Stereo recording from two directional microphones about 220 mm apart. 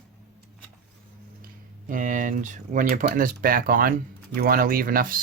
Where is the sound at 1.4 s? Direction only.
40° right (ahead or behind).